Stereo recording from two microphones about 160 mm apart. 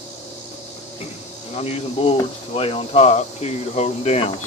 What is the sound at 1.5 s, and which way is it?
Speech, 40° left (ahead or behind).